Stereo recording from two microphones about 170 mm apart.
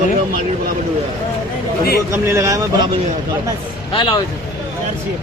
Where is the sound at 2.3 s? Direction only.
15° right (ahead or behind).